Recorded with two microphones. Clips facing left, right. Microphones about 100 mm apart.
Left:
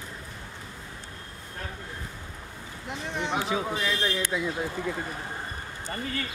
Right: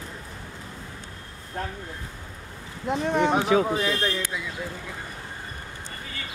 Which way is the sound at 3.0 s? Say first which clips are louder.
Right 10 dB; 55° right (ahead or behind).